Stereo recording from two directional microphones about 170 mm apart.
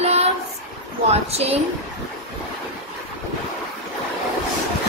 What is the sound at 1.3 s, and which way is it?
Speech, 35° right (ahead or behind).